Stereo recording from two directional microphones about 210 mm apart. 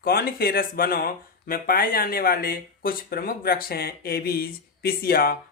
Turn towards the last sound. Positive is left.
turn(degrees=45)  # may be behind; listen again after turning